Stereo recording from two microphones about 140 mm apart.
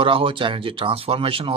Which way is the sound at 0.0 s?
40° right (ahead or behind).